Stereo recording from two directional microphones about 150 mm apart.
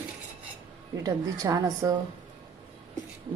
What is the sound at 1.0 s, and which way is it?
Speech, 25° right (ahead or behind).